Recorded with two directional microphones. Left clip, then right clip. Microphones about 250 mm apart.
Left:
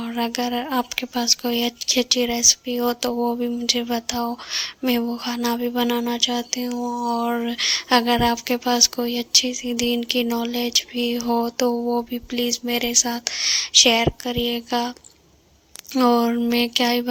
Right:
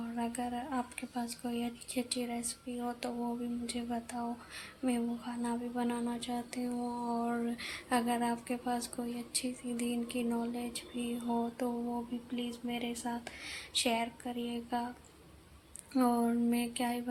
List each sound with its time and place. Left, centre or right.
0.0 s speech: left